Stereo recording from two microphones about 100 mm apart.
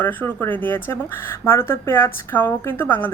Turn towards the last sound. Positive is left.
turn(degrees=20)  # may be behind; listen again after turning